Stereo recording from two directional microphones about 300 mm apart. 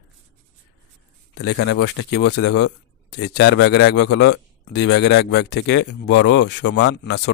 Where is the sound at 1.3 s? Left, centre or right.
Left.